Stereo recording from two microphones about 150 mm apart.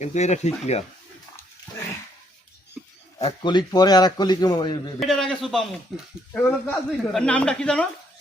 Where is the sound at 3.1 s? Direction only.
35° left (ahead or behind).